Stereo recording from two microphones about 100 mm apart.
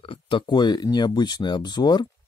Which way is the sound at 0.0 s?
60° left (ahead or behind).